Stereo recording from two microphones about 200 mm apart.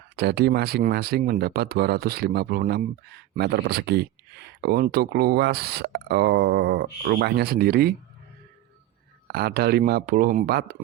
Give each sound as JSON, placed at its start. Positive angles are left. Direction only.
{"t": 0.2, "sound": "speech", "side_deg": -55}
{"t": 9.2, "sound": "speech", "side_deg": -50}